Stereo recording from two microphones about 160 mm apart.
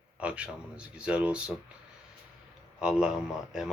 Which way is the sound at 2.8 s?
5° right (ahead or behind).